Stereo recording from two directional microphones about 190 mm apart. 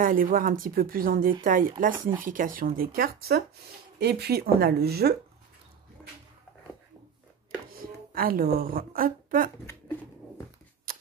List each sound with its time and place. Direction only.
0.0 s speech: 45° right (ahead or behind)
7.7 s a woman's voice: 50° right (ahead or behind)
9.7 s shuffling cards: 15° left (ahead or behind)